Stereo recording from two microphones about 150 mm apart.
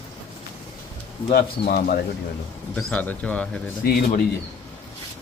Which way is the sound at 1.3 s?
90° left.